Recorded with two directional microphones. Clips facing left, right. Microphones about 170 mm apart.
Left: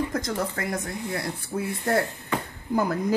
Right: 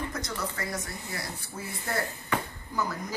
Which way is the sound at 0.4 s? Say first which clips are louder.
Left 6 dB; 55° left (ahead or behind).